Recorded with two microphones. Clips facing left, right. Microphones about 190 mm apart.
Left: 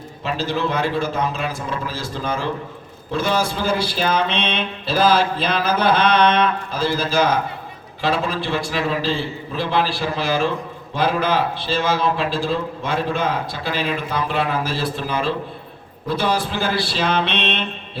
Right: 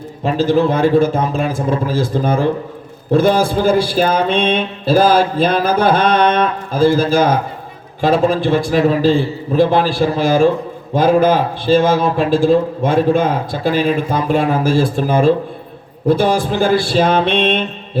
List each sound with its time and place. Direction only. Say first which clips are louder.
0.3 s a man's voice: right 9 dB; 50° right (ahead or behind)